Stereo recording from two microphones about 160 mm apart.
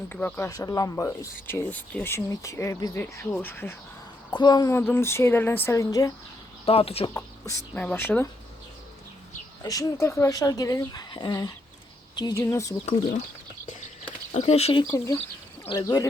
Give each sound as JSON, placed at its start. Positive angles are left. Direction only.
{"t": 0.1, "sound": "speech", "side_deg": 10}
{"t": 4.4, "sound": "speech", "side_deg": 25}
{"t": 6.7, "sound": "speech", "side_deg": 35}
{"t": 7.7, "sound": "speech", "side_deg": 5}
{"t": 9.6, "sound": "speech", "side_deg": 20}
{"t": 12.8, "sound": "speech", "side_deg": 50}
{"t": 14.3, "sound": "speech", "side_deg": 40}
{"t": 14.9, "sound": "speech", "side_deg": 20}